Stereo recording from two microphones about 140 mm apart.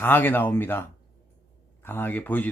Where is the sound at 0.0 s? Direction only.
15° left (ahead or behind).